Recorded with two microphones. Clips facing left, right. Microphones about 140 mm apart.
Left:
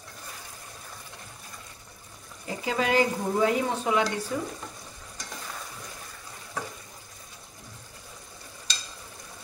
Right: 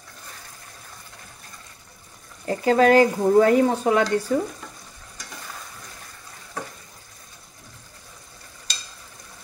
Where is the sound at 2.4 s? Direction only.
50° right (ahead or behind).